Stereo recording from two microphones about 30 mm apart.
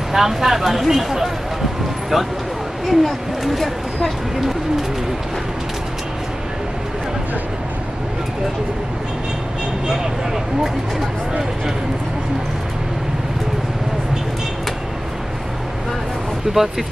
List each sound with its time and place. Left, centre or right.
0.1 s speech: centre
2.9 s a woman's voice: centre
16.5 s speech: right